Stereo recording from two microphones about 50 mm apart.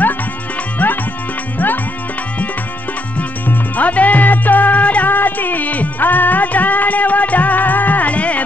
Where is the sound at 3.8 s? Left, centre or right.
Left.